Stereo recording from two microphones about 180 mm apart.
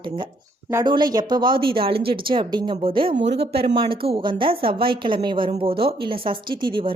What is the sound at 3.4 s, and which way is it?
A woman's voice, 30° right (ahead or behind).